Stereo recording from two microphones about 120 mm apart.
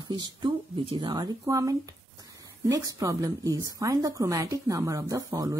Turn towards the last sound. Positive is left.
turn(degrees=-30)  # may be behind; listen again after turning